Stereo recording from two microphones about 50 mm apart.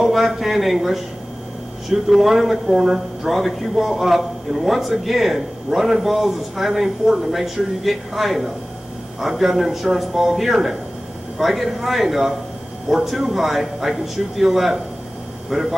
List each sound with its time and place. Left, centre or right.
0.0 s a man's voice: centre